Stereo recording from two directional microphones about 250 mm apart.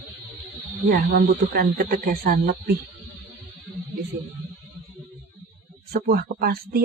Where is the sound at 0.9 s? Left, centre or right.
Right.